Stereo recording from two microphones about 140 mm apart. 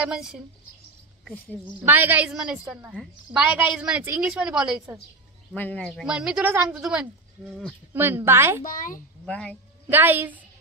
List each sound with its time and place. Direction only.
0.1 s a woman's voice: 5° right (ahead or behind)
1.8 s a woman's voice: 10° right (ahead or behind)
5.5 s a woman's voice: 10° left (ahead or behind); by 8.6 s 15° right (ahead or behind)
8.6 s speech: 80° left
9.2 s speech: 5° left (ahead or behind)
9.8 s a woman's voice: 15° right (ahead or behind)